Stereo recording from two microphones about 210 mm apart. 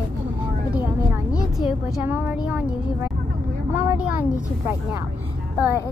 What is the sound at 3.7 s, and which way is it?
Speech, 5° right (ahead or behind).